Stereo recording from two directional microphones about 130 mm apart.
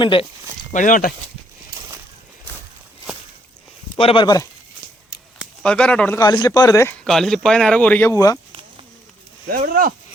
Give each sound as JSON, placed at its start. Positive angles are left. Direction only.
{"t": 0.0, "sound": "speech", "side_deg": 40}
{"t": 0.7, "sound": "speech", "side_deg": 80}
{"t": 3.9, "sound": "speech", "side_deg": 45}
{"t": 5.6, "sound": "speech", "side_deg": 5}
{"t": 6.1, "sound": "speech", "side_deg": 30}
{"t": 6.9, "sound": "speech", "side_deg": 5}
{"t": 9.5, "sound": "speech", "side_deg": -90}